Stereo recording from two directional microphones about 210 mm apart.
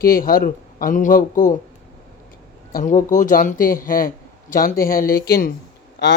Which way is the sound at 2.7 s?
40° left (ahead or behind).